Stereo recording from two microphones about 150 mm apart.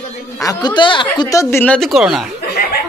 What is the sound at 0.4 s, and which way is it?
A man's voice, 25° left (ahead or behind).